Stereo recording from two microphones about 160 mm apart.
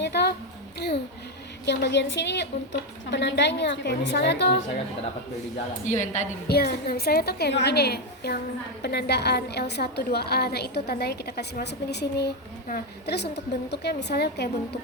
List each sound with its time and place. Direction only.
0.0 s a sound: 90° left
0.8 s a woman's voice: 90° left
5.8 s a woman's voice: 50° left (ahead or behind)
6.5 s a woman's voice: 80° left
12.6 s a woman's voice: 80° left